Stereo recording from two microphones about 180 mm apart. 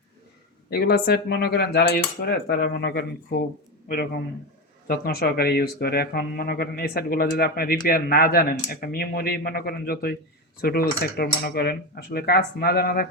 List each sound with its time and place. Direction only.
0.7 s speech: 65° left (ahead or behind)